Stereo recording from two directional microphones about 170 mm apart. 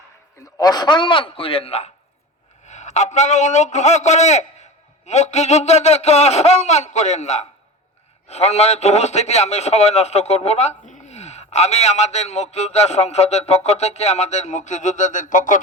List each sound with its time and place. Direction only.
0.4 s a man's voice: 20° left (ahead or behind); by 15.5 s 50° left (ahead or behind)